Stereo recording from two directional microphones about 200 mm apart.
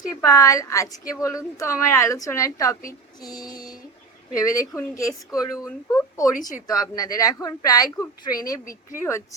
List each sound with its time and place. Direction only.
0.2 s a woman's voice: 15° left (ahead or behind)